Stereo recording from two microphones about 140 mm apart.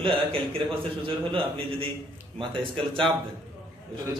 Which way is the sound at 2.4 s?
35° right (ahead or behind).